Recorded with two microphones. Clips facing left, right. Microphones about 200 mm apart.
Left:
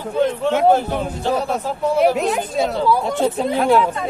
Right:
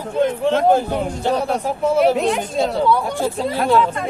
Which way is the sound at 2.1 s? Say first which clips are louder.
Right 1 dB; centre (ahead or behind).